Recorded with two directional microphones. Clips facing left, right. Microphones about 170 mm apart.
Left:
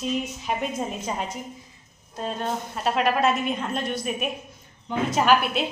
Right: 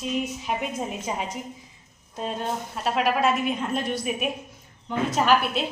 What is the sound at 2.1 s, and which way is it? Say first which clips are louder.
Speech: even; 15° right (ahead or behind).